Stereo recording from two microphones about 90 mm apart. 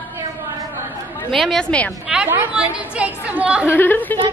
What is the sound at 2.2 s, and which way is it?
A woman's voice, 20° right (ahead or behind).